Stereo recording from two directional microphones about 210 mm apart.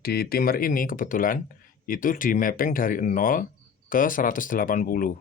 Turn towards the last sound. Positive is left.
turn(degrees=40)  # may be behind; listen again after turning